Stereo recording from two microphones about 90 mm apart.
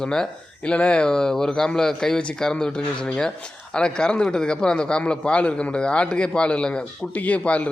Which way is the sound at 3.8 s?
10° left (ahead or behind).